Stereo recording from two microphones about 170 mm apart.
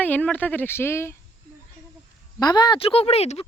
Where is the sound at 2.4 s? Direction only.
25° left (ahead or behind).